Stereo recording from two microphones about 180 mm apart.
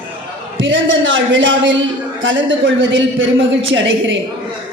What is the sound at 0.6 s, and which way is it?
A man's voice, 90° right.